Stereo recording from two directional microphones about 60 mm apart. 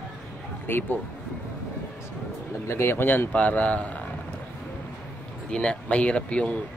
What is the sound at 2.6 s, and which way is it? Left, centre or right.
Speech, left.